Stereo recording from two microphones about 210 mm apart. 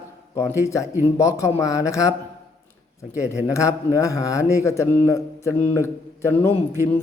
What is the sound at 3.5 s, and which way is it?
A man's voice, 15° left (ahead or behind).